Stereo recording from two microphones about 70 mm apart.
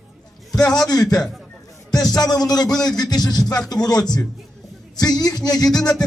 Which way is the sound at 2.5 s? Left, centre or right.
Left.